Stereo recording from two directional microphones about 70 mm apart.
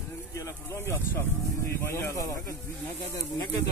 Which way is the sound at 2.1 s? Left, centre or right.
Left.